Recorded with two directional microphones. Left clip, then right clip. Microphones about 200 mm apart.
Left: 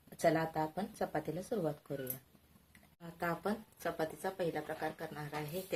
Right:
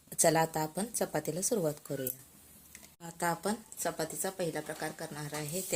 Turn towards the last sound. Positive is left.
turn(degrees=-35)  # may be behind; listen again after turning